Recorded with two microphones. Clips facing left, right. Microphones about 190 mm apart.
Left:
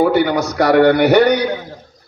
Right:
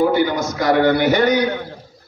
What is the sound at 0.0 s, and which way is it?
A man's voice, 65° left (ahead or behind).